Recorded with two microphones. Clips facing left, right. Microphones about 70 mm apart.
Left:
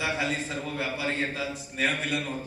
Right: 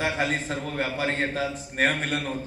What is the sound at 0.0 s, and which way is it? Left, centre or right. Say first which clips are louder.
A man's voice: right 3 dB; right.